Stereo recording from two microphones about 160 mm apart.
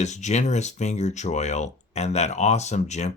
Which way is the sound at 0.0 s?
45° left (ahead or behind).